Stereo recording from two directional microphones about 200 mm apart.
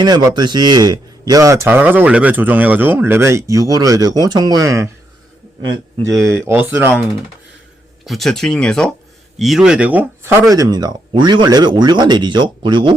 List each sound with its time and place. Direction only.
0.0 s a man's voice: 20° right (ahead or behind)
6.1 s a man's voice: 15° right (ahead or behind)
8.0 s speech: centre (ahead or behind); by 12.9 s 25° right (ahead or behind)